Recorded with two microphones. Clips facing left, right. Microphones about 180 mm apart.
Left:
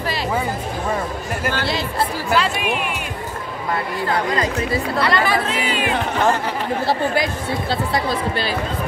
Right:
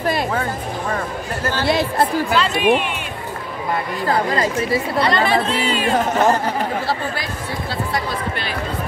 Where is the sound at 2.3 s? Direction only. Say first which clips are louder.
Right 2 dB; 5° left (ahead or behind).